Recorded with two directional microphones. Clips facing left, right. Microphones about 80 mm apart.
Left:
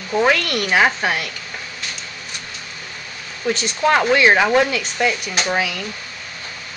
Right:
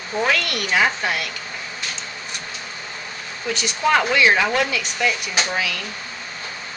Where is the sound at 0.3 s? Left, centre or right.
Left.